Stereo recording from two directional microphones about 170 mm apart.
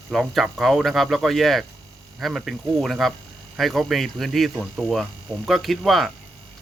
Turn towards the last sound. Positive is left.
turn(degrees=0)  # may be behind; listen again after turning